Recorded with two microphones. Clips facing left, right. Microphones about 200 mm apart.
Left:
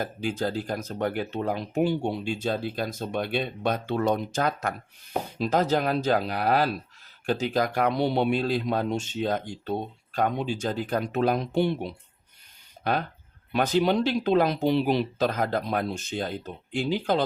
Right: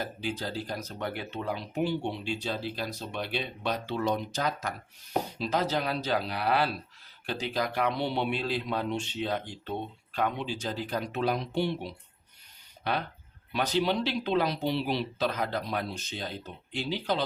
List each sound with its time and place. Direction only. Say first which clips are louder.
0.0 s speech: left 6 dB; 50° left (ahead or behind)